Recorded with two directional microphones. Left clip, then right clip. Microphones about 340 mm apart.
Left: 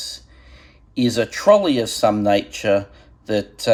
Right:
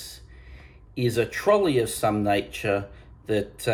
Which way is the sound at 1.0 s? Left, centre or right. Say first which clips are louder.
Left 7 dB; centre.